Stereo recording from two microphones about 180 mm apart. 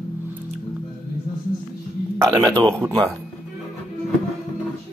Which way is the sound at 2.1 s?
20° right (ahead or behind).